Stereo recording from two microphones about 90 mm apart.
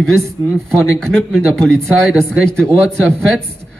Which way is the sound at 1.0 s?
5° left (ahead or behind).